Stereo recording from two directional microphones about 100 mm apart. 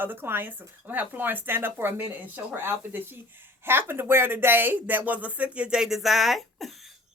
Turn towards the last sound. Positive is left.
turn(degrees=0)  # may be behind; listen again after turning